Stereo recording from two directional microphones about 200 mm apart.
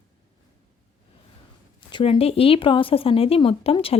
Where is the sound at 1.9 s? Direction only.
25° left (ahead or behind).